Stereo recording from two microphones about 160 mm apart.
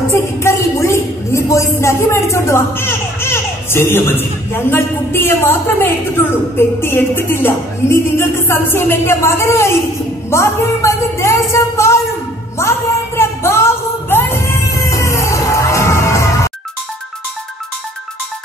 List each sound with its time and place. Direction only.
0.1 s a woman's voice: 15° left (ahead or behind)
12.5 s music: 15° left (ahead or behind)